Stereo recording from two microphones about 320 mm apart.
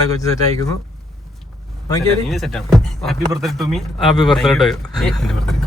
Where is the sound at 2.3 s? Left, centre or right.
Centre.